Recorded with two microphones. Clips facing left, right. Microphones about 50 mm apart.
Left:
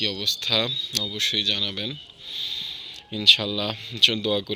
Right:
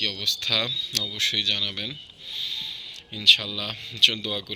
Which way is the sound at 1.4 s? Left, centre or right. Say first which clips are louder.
Left 1 dB; right.